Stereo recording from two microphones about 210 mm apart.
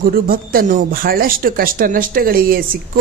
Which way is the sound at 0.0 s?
45° right (ahead or behind).